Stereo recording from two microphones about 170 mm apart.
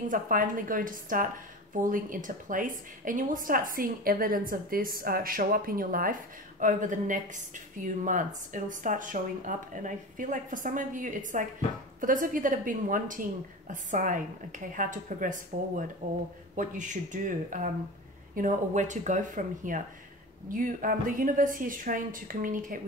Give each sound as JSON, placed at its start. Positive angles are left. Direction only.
{"t": 0.1, "sound": "a woman's voice", "side_deg": -55}